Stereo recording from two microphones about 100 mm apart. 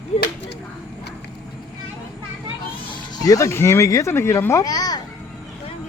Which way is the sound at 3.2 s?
30° left (ahead or behind).